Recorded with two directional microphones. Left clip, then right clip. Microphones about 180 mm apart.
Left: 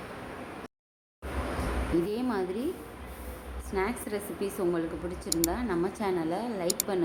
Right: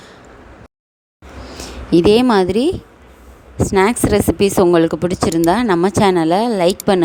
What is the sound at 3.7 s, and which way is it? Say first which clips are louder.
Speech: right 17 dB; 60° right (ahead or behind).